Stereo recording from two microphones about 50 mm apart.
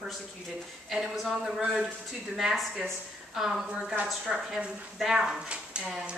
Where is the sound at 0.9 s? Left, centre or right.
Centre; by 6.2 s right.